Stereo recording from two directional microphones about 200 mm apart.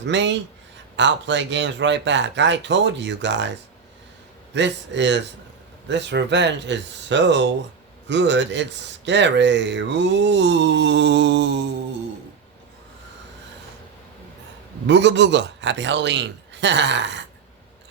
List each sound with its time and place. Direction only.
0.0 s speech: 65° right (ahead or behind)
4.5 s speech: 60° right (ahead or behind)
14.8 s speech: 60° right (ahead or behind)